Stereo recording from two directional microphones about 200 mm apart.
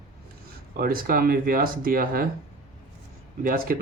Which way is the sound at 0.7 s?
45° right (ahead or behind).